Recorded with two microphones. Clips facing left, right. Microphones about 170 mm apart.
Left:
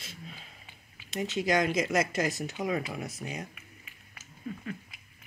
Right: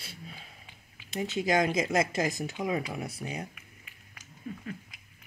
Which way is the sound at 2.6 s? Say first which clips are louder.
Even; 25° right (ahead or behind).